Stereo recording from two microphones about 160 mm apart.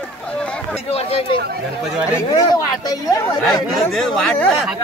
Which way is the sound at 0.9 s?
40° left (ahead or behind).